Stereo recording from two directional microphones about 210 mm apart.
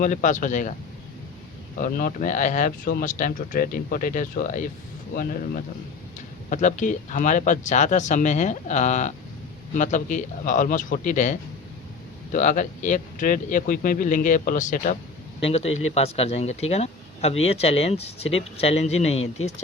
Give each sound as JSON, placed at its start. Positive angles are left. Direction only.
{"t": 0.0, "sound": "speech", "side_deg": 35}
{"t": 1.8, "sound": "speech", "side_deg": 40}
{"t": 6.5, "sound": "speech", "side_deg": 35}